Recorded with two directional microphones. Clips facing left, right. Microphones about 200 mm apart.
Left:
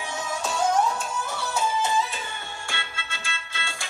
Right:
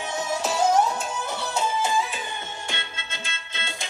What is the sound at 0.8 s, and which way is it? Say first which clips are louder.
Music: even; 20° right (ahead or behind).